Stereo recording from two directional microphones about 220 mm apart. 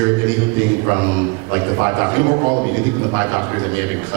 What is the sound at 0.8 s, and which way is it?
Music, 20° right (ahead or behind).